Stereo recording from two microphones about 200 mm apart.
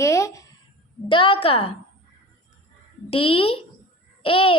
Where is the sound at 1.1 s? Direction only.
25° left (ahead or behind).